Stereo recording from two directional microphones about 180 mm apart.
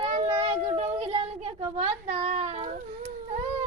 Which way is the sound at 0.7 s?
30° right (ahead or behind).